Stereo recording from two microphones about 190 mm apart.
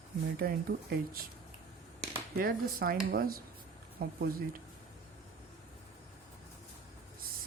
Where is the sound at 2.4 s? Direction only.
50° right (ahead or behind).